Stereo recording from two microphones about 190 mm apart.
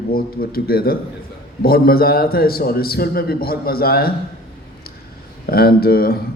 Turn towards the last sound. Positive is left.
turn(degrees=55)  # may be behind; listen again after turning